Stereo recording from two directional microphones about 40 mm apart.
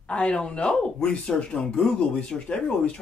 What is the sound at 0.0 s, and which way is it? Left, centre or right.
Speech, left.